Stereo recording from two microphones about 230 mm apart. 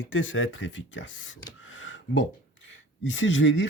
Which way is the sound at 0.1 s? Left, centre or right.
Left.